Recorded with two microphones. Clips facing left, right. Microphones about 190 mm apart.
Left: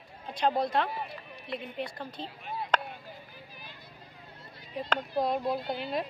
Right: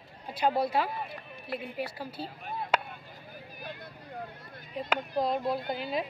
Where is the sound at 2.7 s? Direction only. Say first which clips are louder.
Even; 10° right (ahead or behind).